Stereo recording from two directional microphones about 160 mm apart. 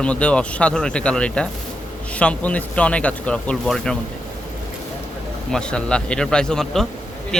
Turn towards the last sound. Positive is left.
turn(degrees=5)  # may be behind; listen again after turning